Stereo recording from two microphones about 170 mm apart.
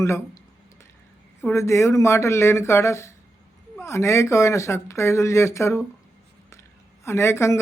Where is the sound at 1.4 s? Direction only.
15° left (ahead or behind).